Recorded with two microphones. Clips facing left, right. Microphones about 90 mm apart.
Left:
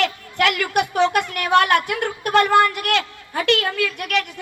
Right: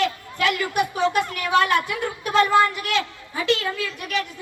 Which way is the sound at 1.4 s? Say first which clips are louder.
Left 5 dB; 60° left (ahead or behind).